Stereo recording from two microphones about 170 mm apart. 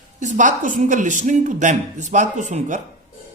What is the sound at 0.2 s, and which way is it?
Speech, 50° right (ahead or behind).